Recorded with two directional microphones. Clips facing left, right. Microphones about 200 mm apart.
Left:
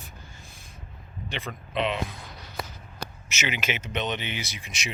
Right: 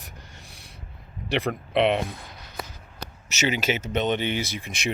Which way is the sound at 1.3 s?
65° right (ahead or behind).